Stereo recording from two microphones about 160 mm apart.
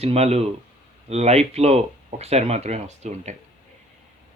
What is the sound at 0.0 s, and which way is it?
Speech, 40° right (ahead or behind).